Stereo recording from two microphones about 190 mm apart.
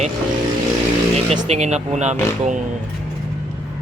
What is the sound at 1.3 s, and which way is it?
Speech, 35° right (ahead or behind).